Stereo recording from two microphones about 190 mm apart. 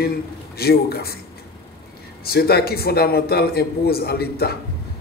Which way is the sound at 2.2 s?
55° left (ahead or behind).